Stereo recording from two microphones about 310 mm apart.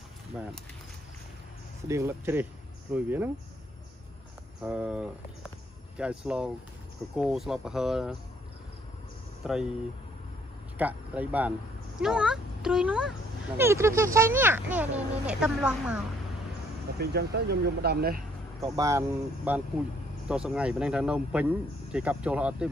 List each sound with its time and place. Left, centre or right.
1.9 s speech: centre
4.6 s speech: centre
9.4 s speech: centre
10.8 s speech: centre
17.0 s speech: right
18.8 s speech: centre